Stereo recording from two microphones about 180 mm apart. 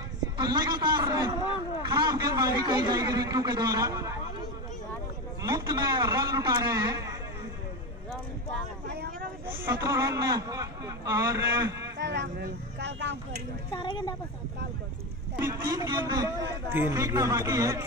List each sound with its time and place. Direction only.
0.2 s a man's voice: 20° right (ahead or behind)
5.4 s a man's voice: 20° right (ahead or behind)
8.8 s vehicle: 65° right (ahead or behind)
9.5 s a man's voice: 15° right (ahead or behind)
12.0 s speech: 70° right (ahead or behind)
13.7 s speech: 25° left (ahead or behind)
15.3 s a man's voice: 15° right (ahead or behind)